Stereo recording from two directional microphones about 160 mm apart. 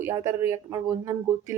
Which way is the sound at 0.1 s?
25° right (ahead or behind).